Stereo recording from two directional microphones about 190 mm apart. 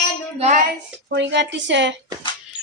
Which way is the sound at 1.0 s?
65° right (ahead or behind).